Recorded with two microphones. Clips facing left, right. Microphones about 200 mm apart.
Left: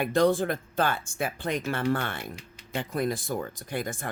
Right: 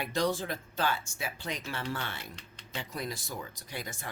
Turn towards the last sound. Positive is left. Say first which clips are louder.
# left 8 dB
turn(degrees=50)  # may be behind; listen again after turning